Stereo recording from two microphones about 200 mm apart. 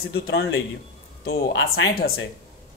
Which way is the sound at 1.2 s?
50° left (ahead or behind).